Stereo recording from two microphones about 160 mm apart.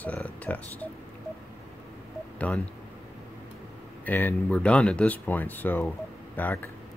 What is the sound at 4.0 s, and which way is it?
Speech, 15° left (ahead or behind).